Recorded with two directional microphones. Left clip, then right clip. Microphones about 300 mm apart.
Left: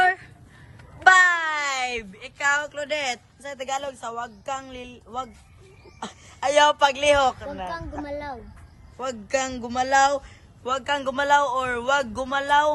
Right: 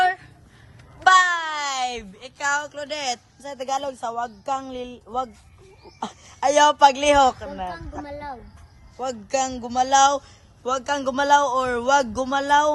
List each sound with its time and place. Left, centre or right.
0.0 s a sound: centre
1.0 s speech: centre
8.0 s a woman's voice: centre